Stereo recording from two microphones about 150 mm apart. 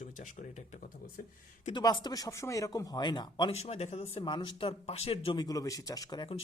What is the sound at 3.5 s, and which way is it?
Speech, 45° left (ahead or behind).